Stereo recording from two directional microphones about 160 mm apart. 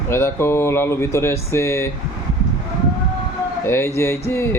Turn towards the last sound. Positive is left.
turn(degrees=15)  # may be behind; listen again after turning